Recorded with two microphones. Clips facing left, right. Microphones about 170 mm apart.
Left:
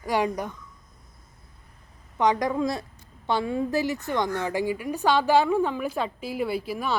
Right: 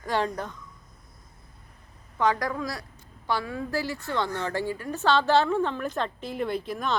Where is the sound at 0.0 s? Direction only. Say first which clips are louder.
Left 2 dB; 10° left (ahead or behind).